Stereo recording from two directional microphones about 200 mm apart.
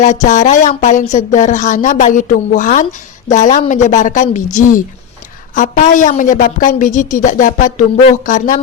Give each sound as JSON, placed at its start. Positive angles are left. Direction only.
{"t": 0.0, "sound": "speech", "side_deg": 40}
{"t": 5.5, "sound": "speech", "side_deg": 40}